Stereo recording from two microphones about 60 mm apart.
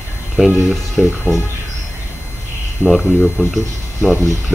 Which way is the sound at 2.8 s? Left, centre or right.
Centre.